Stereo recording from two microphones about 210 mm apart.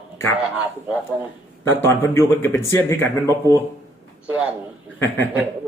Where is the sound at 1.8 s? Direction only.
10° left (ahead or behind).